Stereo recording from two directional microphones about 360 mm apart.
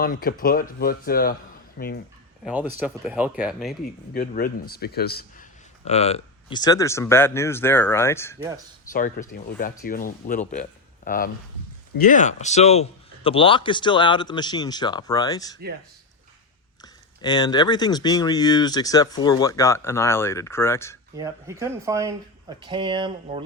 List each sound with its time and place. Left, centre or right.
0.0 s speech: left
2.4 s speech: centre
4.1 s a man's voice: left; by 8.4 s centre
8.9 s a man's voice: left
16.8 s a man's voice: centre
21.2 s speech: centre